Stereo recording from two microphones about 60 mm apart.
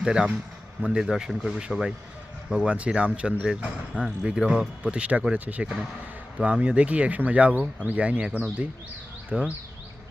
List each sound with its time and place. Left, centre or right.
0.0 s speech: centre